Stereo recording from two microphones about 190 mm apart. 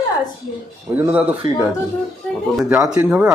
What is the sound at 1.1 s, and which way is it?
Speech, 10° right (ahead or behind).